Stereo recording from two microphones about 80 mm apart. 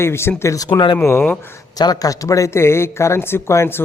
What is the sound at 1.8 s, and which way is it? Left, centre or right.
A man's voice, left.